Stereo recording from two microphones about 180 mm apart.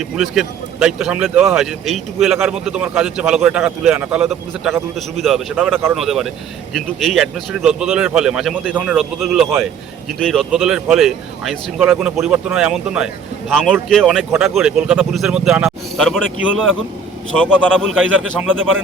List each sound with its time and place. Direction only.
0.2 s speech: 5° right (ahead or behind)
17.3 s speech: 5° left (ahead or behind)
18.0 s speech: 90° right